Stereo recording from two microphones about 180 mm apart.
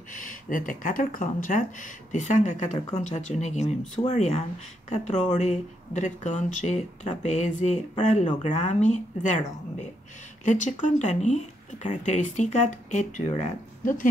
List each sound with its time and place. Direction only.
0.1 s speech: 50° left (ahead or behind)
10.4 s speech: 45° left (ahead or behind)